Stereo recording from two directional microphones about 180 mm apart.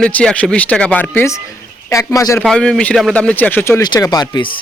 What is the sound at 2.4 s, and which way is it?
A man's voice, 5° left (ahead or behind).